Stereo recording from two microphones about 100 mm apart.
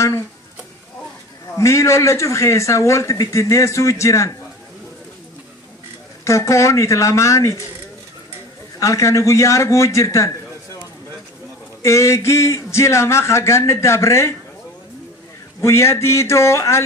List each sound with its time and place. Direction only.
1.6 s a man's voice: 30° left (ahead or behind)
6.2 s a man's voice: 30° left (ahead or behind)
8.7 s a man's voice: 30° left (ahead or behind)
11.8 s speech: 30° left (ahead or behind)
15.6 s speech: 30° left (ahead or behind)